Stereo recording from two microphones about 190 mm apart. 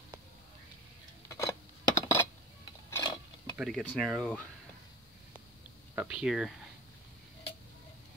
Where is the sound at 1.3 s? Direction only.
15° left (ahead or behind).